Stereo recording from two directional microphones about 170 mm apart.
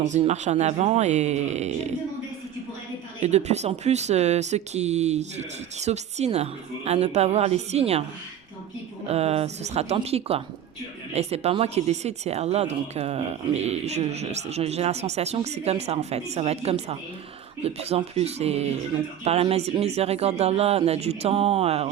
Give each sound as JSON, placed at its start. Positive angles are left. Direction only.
{"t": 0.0, "sound": "speech", "side_deg": -45}
{"t": 3.2, "sound": "speech", "side_deg": -40}
{"t": 9.0, "sound": "speech", "side_deg": -35}